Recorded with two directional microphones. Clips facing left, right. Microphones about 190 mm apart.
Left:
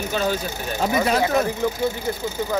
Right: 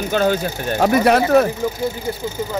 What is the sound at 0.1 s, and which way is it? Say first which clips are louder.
Speech: right 7 dB; 55° right (ahead or behind).